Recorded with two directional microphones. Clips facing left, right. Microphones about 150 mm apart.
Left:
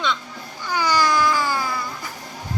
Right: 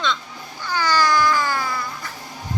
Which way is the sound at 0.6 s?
15° left (ahead or behind).